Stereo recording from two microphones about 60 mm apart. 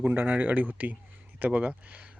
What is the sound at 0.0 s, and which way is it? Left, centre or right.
Speech, right.